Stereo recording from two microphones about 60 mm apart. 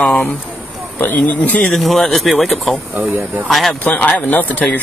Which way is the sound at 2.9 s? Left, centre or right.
Right.